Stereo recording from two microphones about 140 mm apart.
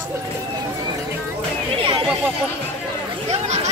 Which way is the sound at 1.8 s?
40° right (ahead or behind).